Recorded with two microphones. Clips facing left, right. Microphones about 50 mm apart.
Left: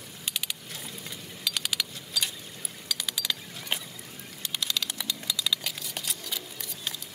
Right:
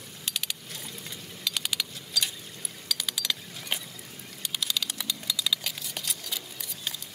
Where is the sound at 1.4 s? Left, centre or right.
Centre.